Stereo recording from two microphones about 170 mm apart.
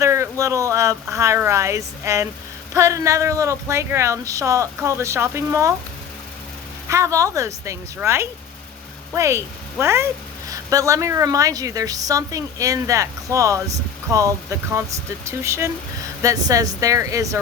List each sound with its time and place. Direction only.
0.0 s speech: 15° right (ahead or behind)
6.8 s a woman's voice: 15° right (ahead or behind)